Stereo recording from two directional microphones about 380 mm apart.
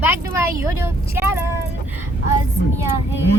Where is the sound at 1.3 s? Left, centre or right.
Left.